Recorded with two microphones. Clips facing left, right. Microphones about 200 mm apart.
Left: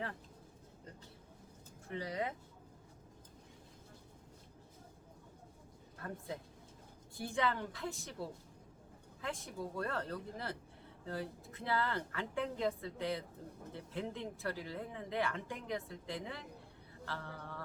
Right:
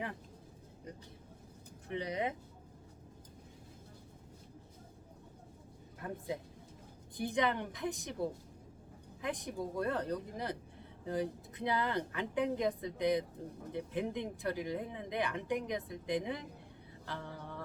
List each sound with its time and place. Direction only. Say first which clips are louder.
1.9 s speech: right 3 dB; 20° right (ahead or behind)
6.0 s a woman's voice: right 4 dB; 15° right (ahead or behind)